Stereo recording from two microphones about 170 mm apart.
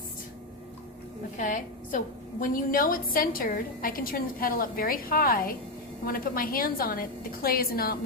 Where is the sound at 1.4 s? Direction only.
50° left (ahead or behind).